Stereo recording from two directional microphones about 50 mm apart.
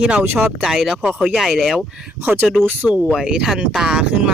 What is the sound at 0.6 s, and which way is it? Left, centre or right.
Speech, centre.